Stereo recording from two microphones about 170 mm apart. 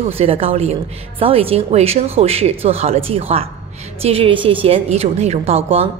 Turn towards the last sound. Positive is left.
turn(degrees=-35)  # may be behind; listen again after turning